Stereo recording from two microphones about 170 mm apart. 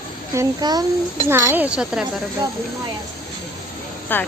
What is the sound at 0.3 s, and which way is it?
Speech, 25° right (ahead or behind).